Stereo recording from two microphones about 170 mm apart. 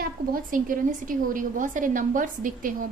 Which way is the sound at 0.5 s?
50° right (ahead or behind).